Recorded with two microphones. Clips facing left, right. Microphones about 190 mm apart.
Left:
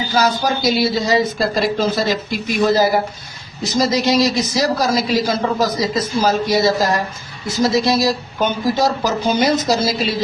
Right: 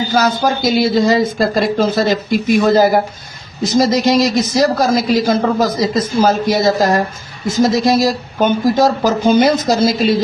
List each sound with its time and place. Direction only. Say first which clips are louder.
0.1 s speech: right 1 dB; 50° right (ahead or behind)